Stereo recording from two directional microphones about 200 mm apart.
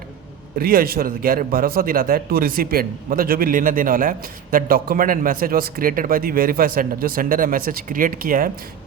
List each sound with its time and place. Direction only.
0.6 s a man's voice: 50° right (ahead or behind)